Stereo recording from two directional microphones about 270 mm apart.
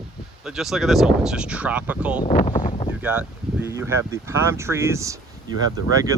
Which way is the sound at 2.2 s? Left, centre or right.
Left.